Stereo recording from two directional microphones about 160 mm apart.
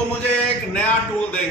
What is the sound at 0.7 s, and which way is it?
Speech, 10° left (ahead or behind).